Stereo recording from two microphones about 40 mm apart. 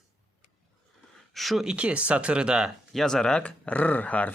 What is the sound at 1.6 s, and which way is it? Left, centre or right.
Speech, right.